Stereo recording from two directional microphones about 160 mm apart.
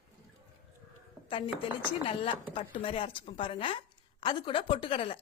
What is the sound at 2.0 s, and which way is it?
A woman's voice, 35° left (ahead or behind).